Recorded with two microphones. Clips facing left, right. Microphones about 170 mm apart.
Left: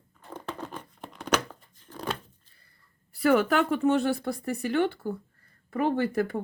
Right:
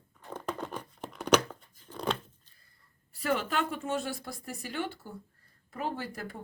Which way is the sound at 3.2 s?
60° left (ahead or behind).